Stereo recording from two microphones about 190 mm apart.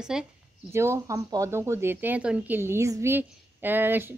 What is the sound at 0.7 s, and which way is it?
Speech, 15° right (ahead or behind).